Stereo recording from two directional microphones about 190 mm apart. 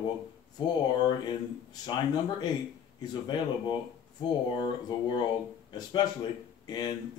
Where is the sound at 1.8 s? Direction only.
25° left (ahead or behind).